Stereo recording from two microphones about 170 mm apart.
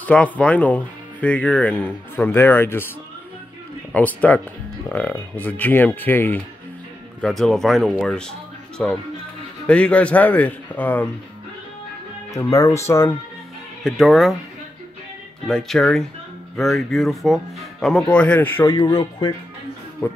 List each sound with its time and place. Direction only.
0.0 s speech: 5° left (ahead or behind)
3.9 s speech: 10° left (ahead or behind)
7.2 s speech: centre (ahead or behind)
12.4 s speech: 20° left (ahead or behind)
13.8 s speech: centre (ahead or behind)
15.4 s speech: 5° left (ahead or behind)
18.8 s speech: 25° left (ahead or behind)